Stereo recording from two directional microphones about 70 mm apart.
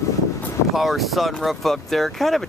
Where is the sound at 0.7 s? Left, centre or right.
Centre.